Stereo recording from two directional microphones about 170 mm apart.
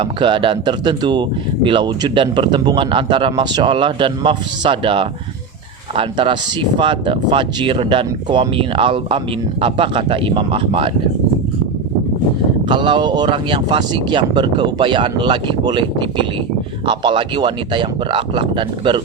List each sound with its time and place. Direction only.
0.0 s speech: 30° right (ahead or behind)
12.6 s speech: 30° right (ahead or behind)